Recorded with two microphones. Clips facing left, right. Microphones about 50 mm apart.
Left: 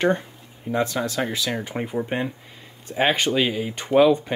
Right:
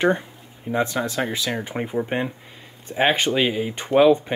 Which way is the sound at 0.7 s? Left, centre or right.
Centre.